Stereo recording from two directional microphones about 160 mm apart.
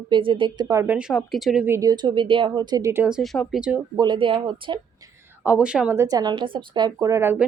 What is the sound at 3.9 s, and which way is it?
Speech, 30° right (ahead or behind).